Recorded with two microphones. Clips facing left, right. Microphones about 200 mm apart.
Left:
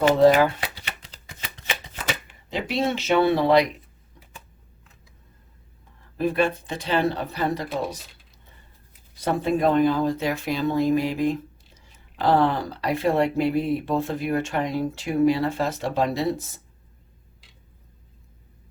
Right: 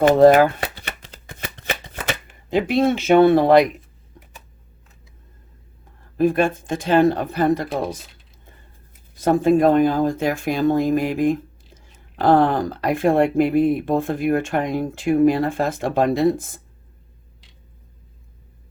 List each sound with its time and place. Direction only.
0.0 s shuffling cards: 50° right (ahead or behind)
2.5 s speech: 55° right (ahead or behind)
6.1 s speech: 50° right (ahead or behind)
9.1 s speech: 45° right (ahead or behind)